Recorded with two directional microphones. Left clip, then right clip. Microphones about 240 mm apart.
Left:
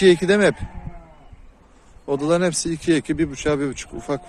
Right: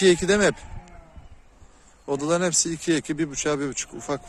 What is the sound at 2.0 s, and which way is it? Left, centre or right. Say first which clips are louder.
Speech: left 4 dB; centre.